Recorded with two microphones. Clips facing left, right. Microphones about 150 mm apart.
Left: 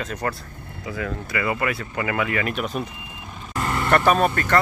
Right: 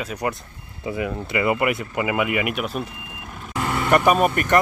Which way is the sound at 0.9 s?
25° right (ahead or behind).